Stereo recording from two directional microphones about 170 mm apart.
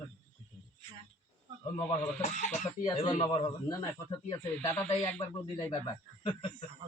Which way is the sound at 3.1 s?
30° left (ahead or behind).